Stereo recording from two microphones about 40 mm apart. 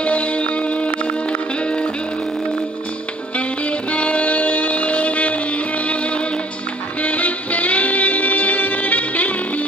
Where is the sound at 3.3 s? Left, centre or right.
Left.